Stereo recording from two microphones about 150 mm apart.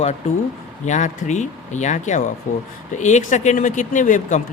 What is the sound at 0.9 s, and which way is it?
A man's voice, 55° left (ahead or behind).